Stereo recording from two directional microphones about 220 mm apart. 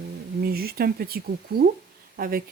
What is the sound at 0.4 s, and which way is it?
Speech, 45° right (ahead or behind).